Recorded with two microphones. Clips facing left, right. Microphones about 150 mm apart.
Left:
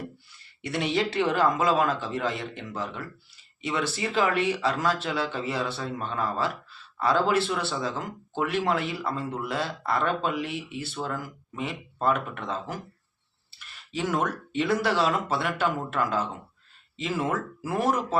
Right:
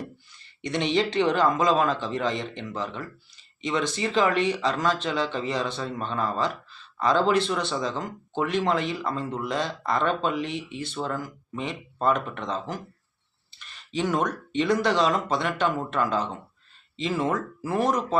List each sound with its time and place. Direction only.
0.6 s speech: 5° left (ahead or behind)
13.9 s speech: 5° left (ahead or behind)